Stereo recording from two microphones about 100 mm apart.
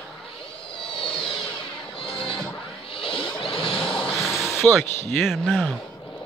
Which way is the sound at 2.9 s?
60° left (ahead or behind).